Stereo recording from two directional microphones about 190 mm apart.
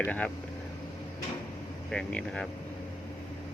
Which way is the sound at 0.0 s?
5° left (ahead or behind).